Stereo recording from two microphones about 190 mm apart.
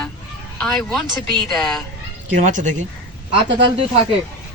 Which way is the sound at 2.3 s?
40° right (ahead or behind).